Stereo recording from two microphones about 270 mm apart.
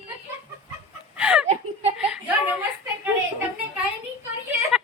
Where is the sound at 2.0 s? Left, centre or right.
Centre.